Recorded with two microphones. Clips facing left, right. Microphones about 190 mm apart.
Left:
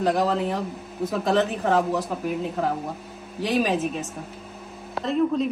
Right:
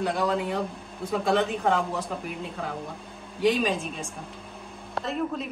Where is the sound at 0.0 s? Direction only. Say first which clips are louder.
Left 4 dB; 70° left (ahead or behind).